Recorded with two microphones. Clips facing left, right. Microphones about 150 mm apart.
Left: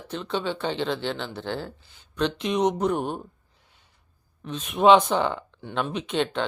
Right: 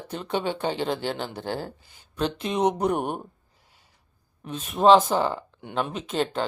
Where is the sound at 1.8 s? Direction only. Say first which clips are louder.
Left 3 dB; 10° right (ahead or behind).